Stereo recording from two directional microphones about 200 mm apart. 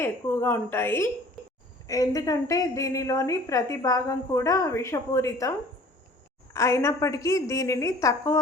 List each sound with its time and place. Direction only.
0.0 s a woman's voice: 10° left (ahead or behind)